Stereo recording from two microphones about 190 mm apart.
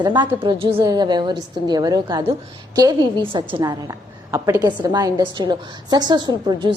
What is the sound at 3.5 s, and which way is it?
A woman's voice, 20° right (ahead or behind).